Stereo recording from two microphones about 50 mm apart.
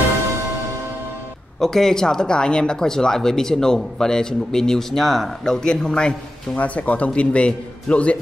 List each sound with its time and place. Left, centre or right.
1.6 s speech: centre
5.4 s speech: centre
6.6 s a man's voice: left